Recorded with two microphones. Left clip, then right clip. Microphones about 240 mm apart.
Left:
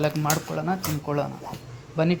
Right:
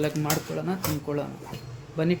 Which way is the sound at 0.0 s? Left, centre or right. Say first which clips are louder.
Left 3 dB; centre.